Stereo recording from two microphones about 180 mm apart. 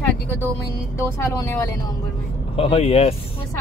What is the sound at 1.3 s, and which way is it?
Speech, 15° left (ahead or behind).